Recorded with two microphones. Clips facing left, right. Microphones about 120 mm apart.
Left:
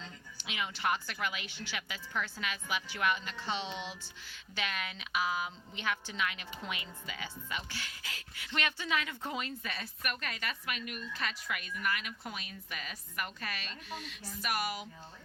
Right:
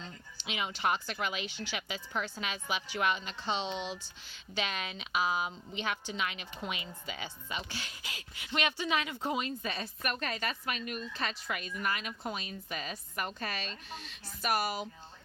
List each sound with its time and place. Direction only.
0.4 s a woman's voice: 20° right (ahead or behind)